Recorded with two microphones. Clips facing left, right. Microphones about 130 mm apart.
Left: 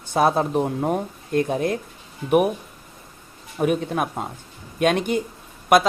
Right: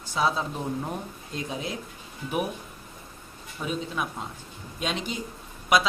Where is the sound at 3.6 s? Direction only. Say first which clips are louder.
Left 9 dB; 60° left (ahead or behind).